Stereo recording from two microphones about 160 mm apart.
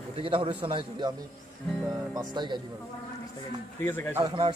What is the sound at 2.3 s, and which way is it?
Speech, 30° right (ahead or behind).